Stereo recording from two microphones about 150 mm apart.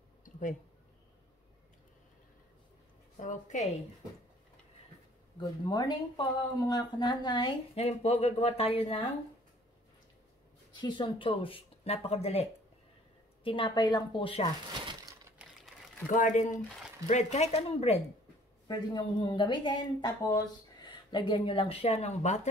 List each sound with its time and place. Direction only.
0.2 s a sound: 60° left (ahead or behind)
3.2 s speech: 55° left (ahead or behind)
5.4 s speech: 30° left (ahead or behind)
7.7 s speech: 45° left (ahead or behind)
10.7 s a woman's voice: 30° left (ahead or behind)
16.1 s speech: 60° left (ahead or behind)
17.1 s speech: 50° left (ahead or behind)
18.7 s a woman's voice: 30° left (ahead or behind); by 22.5 s 50° left (ahead or behind)